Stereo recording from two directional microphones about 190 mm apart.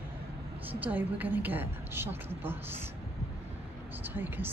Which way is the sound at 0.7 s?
10° right (ahead or behind).